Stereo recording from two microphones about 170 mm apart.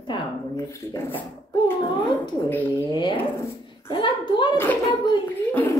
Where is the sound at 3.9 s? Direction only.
30° left (ahead or behind).